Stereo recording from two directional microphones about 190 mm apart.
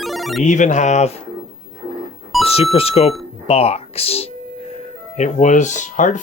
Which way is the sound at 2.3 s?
Centre (ahead or behind).